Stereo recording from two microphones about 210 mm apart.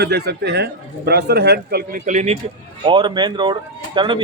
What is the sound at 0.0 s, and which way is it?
Speech, 50° right (ahead or behind).